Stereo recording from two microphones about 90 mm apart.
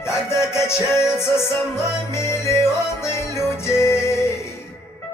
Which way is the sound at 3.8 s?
30° left (ahead or behind).